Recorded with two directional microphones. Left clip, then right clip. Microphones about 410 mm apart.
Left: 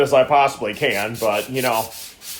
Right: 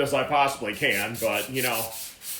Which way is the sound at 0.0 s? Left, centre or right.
Centre.